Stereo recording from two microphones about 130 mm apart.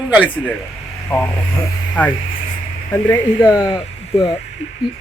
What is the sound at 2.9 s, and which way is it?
Speech, 15° left (ahead or behind).